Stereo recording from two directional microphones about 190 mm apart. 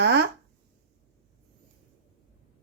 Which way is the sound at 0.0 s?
70° right (ahead or behind).